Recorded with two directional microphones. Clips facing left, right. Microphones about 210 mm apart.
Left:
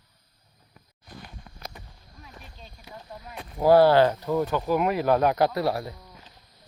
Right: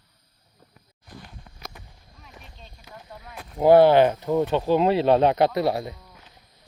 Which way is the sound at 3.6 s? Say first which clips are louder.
Right 2 dB; 20° right (ahead or behind).